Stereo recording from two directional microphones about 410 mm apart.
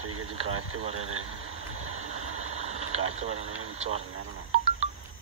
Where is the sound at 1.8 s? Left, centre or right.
Right.